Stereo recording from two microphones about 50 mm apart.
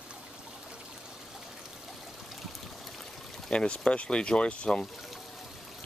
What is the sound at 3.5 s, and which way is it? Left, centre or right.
Speech, centre.